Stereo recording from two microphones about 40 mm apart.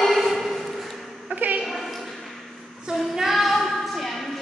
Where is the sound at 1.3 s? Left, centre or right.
Right.